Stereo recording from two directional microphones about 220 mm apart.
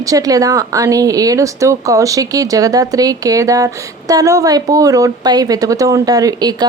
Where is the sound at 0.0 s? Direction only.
15° right (ahead or behind).